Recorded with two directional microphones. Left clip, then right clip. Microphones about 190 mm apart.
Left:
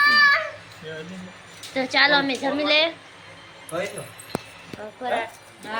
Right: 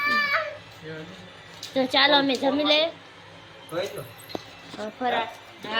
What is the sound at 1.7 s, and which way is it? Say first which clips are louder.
A child's voice: left 1 dB; 15° right (ahead or behind).